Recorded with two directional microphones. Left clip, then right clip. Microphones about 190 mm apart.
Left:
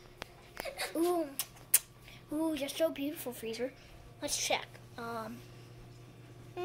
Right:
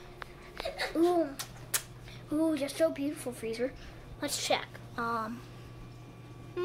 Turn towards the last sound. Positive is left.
turn(degrees=-5)  # may be behind; listen again after turning